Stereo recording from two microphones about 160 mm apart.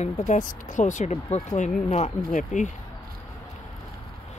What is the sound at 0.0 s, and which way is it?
Speech, 50° left (ahead or behind).